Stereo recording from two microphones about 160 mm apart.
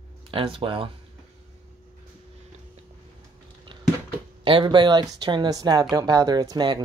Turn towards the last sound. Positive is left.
turn(degrees=-25)  # may be behind; listen again after turning